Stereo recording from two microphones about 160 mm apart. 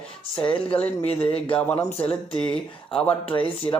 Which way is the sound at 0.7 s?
10° left (ahead or behind).